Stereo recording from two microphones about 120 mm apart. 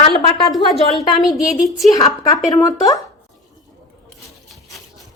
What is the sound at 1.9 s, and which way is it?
Speech, 30° left (ahead or behind).